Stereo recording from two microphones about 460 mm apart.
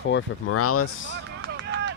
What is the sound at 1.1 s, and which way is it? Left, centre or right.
Vehicle, right.